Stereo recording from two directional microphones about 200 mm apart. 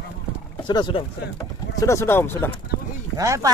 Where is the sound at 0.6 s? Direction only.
25° left (ahead or behind).